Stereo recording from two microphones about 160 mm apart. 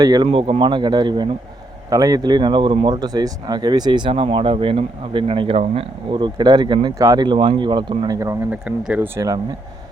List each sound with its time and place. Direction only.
0.0 s speech: 25° right (ahead or behind)
0.3 s speech: 35° right (ahead or behind)
8.4 s speech: 5° right (ahead or behind)